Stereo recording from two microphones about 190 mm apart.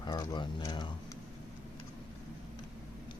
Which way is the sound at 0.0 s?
20° left (ahead or behind).